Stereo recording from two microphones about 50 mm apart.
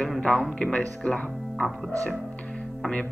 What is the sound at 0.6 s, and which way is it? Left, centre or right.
Speech, centre.